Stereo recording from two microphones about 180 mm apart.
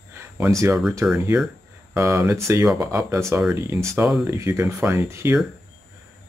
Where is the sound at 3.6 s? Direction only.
15° right (ahead or behind).